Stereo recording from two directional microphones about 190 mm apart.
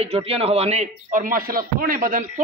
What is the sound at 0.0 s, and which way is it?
A man's voice, 30° right (ahead or behind).